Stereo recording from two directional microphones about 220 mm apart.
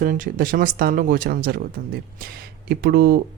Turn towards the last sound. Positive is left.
turn(degrees=-45)  # may be behind; listen again after turning